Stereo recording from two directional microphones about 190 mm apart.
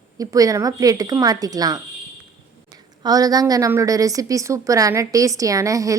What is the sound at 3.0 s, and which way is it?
A woman's voice, 20° right (ahead or behind).